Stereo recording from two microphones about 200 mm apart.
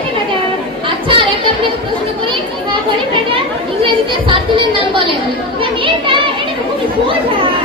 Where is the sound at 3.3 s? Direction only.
25° right (ahead or behind).